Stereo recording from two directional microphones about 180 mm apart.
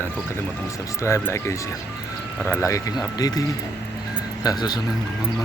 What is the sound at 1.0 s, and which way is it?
Speech, 15° left (ahead or behind).